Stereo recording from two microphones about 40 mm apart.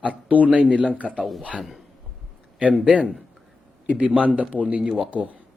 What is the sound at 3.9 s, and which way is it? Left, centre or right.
Speech, right.